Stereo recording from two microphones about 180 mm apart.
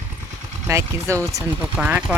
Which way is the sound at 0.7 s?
15° right (ahead or behind).